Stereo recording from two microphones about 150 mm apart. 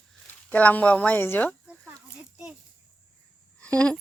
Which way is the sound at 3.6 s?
10° left (ahead or behind).